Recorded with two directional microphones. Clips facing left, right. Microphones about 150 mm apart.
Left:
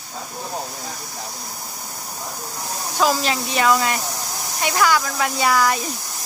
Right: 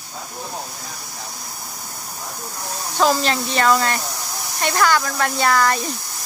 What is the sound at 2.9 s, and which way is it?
Speech, 5° left (ahead or behind).